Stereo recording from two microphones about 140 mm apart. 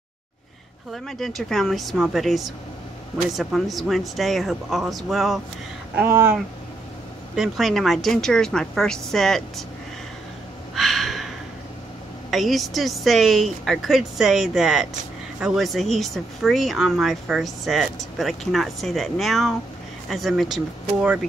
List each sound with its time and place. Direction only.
0.9 s speech: centre (ahead or behind)
5.9 s speech: 20° right (ahead or behind)
7.3 s speech: centre (ahead or behind)
10.7 s a sound: centre (ahead or behind)
12.3 s speech: centre (ahead or behind)